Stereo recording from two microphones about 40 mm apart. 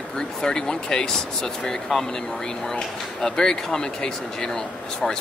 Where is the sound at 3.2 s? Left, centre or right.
Centre.